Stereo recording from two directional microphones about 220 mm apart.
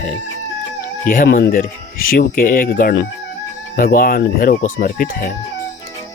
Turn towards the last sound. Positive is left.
turn(degrees=40)  # may be behind; listen again after turning